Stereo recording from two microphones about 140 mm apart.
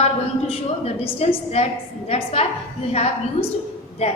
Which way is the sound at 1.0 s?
45° left (ahead or behind).